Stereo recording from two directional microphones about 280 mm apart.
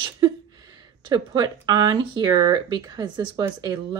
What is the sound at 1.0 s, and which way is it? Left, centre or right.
Speech, centre.